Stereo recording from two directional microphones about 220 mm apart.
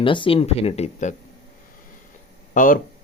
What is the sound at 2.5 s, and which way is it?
Speech, 35° left (ahead or behind).